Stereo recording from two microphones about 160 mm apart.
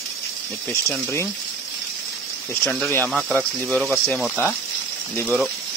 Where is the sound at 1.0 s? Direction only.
15° left (ahead or behind).